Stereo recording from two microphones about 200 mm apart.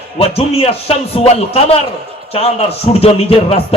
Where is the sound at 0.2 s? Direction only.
30° left (ahead or behind).